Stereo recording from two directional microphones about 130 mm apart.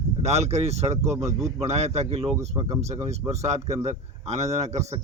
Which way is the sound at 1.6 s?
55° right (ahead or behind).